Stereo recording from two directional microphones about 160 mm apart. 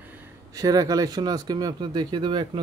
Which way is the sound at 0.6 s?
20° right (ahead or behind).